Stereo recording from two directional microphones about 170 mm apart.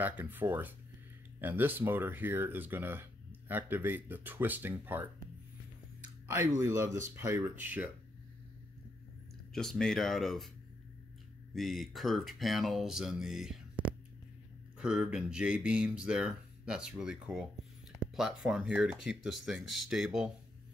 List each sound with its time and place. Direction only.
0.0 s speech: 10° right (ahead or behind)
6.2 s speech: 15° right (ahead or behind)
9.5 s speech: centre (ahead or behind)
11.5 s speech: centre (ahead or behind)